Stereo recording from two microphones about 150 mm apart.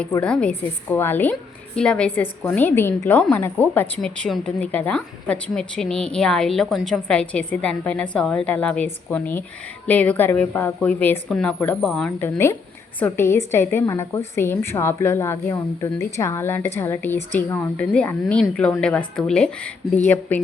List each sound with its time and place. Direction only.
0.2 s a woman's voice: 5° left (ahead or behind)
13.0 s a woman's voice: 15° left (ahead or behind)